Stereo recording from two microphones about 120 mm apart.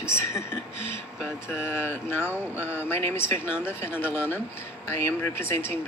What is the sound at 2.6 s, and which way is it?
Speech, 15° left (ahead or behind).